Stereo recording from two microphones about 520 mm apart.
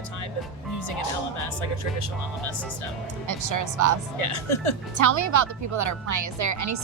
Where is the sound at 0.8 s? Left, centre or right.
Left.